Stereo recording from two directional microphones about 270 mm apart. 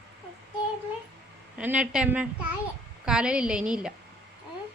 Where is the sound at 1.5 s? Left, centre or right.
Centre.